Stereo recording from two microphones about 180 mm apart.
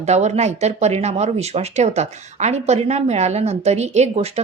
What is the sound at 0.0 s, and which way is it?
A woman's voice, 40° right (ahead or behind).